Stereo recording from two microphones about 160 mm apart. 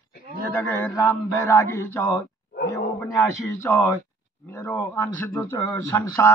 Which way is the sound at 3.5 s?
15° left (ahead or behind).